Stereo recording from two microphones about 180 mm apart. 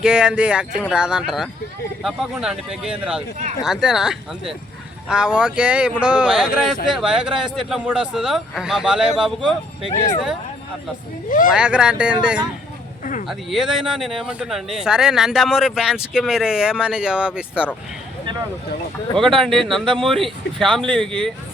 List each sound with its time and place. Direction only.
0.0 s speech: 5° right (ahead or behind)
11.3 s speech: 50° left (ahead or behind)
11.5 s speech: 5° right (ahead or behind)
19.4 s speech: centre (ahead or behind)